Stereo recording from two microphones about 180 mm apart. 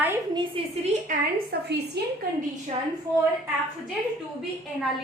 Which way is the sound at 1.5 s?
65° right (ahead or behind).